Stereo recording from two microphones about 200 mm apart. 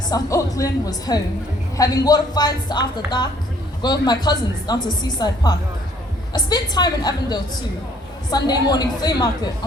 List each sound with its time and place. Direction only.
0.1 s speech: 15° left (ahead or behind)